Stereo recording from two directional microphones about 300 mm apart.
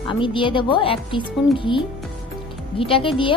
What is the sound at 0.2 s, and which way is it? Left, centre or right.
A woman's voice, centre.